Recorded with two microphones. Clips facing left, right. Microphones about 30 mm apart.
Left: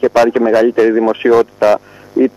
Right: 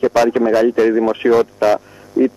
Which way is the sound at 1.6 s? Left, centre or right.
Centre.